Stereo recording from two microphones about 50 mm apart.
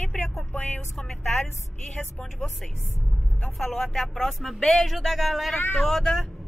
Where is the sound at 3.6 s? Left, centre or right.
Centre.